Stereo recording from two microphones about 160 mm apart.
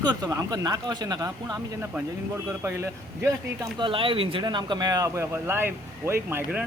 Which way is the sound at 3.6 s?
30° right (ahead or behind).